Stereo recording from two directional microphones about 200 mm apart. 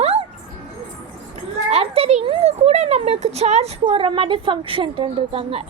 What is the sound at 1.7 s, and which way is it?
A child's voice, 30° right (ahead or behind).